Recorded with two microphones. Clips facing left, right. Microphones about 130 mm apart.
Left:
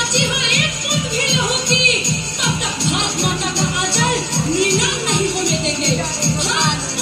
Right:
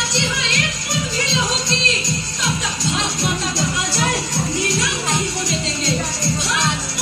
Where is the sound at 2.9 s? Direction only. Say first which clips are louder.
Left 2 dB; 20° left (ahead or behind).